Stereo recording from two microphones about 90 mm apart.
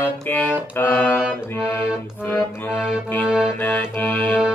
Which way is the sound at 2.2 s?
20° left (ahead or behind).